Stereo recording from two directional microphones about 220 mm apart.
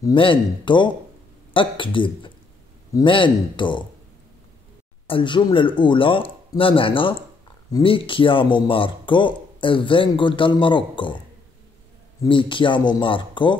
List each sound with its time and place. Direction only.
0.0 s a man's voice: 25° left (ahead or behind)
5.0 s a man's voice: 20° left (ahead or behind)
12.2 s a man's voice: 25° left (ahead or behind)